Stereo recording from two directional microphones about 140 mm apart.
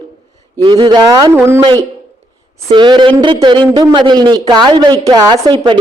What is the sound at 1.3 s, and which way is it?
Speech, 15° right (ahead or behind).